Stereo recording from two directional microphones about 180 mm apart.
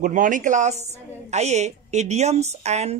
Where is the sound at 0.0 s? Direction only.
45° right (ahead or behind).